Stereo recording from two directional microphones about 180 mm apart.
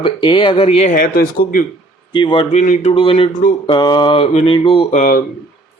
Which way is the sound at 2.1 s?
25° left (ahead or behind).